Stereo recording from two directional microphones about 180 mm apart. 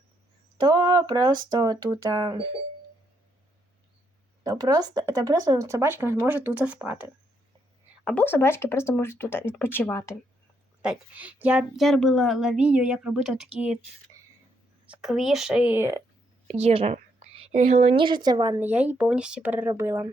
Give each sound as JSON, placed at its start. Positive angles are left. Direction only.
{"t": 0.6, "sound": "speech", "side_deg": -25}
{"t": 4.4, "sound": "speech", "side_deg": -20}
{"t": 8.0, "sound": "speech", "side_deg": 10}
{"t": 10.8, "sound": "a woman's voice", "side_deg": -10}
{"t": 14.8, "sound": "a woman's voice", "side_deg": 0}
{"t": 16.6, "sound": "a woman's voice", "side_deg": -35}
{"t": 18.6, "sound": "speech", "side_deg": -10}